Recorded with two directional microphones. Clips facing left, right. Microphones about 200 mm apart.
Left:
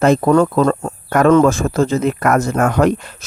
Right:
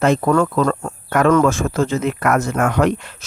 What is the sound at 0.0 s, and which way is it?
Speech, 35° left (ahead or behind).